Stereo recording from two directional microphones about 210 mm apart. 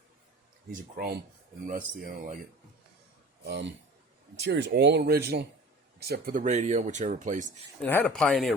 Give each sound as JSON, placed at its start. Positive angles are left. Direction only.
{"t": 0.7, "sound": "speech", "side_deg": -45}
{"t": 3.4, "sound": "speech", "side_deg": -50}
{"t": 7.8, "sound": "speech", "side_deg": 5}